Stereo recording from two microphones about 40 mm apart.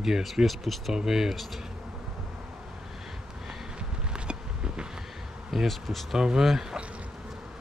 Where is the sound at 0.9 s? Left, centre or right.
Centre.